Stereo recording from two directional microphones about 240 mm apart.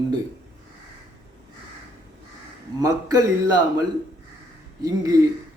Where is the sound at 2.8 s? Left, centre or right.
Centre.